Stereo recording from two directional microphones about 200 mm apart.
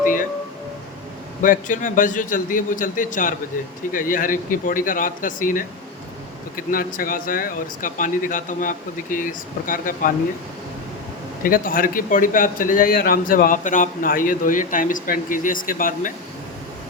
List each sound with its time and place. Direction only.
0.0 s music: 40° left (ahead or behind)
1.4 s a man's voice: 40° left (ahead or behind)
6.7 s a man's voice: 45° left (ahead or behind)
11.4 s a man's voice: 45° left (ahead or behind)